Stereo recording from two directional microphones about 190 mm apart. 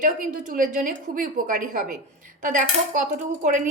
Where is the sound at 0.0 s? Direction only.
45° right (ahead or behind).